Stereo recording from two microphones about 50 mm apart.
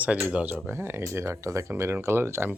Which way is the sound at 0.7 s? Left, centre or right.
Right.